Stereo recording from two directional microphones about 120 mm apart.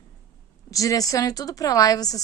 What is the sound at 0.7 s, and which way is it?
A woman's voice, 30° left (ahead or behind).